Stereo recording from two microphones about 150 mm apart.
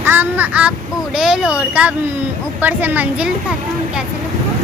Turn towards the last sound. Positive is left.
turn(degrees=-10)  # may be behind; listen again after turning